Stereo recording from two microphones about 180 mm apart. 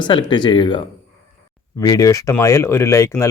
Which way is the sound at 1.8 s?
20° left (ahead or behind).